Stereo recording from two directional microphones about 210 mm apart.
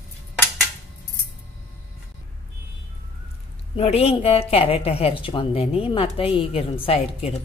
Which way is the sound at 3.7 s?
30° left (ahead or behind).